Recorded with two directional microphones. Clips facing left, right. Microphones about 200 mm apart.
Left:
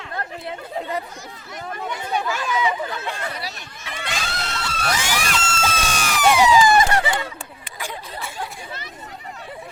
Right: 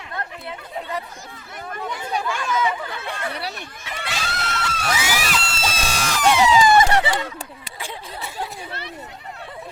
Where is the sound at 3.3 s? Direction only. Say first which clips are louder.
Right 2 dB; 65° right (ahead or behind).